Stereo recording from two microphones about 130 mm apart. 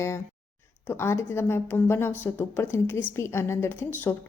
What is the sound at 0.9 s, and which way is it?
A woman's voice, 20° left (ahead or behind).